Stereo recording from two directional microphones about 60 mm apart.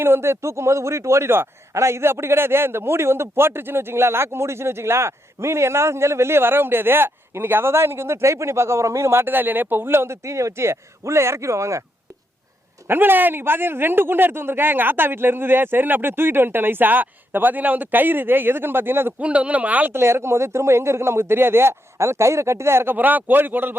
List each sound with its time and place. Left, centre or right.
0.0 s a man's voice: right
9.2 s a man's voice: right
12.9 s a man's voice: right
19.2 s speech: right
19.9 s a man's voice: right
23.0 s a man's voice: right